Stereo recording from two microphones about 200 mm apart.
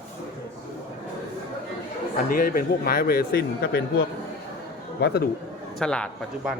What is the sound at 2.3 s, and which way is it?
A man's voice, 45° left (ahead or behind).